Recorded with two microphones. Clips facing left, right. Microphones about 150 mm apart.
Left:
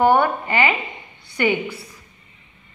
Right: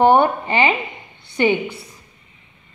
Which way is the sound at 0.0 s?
25° right (ahead or behind).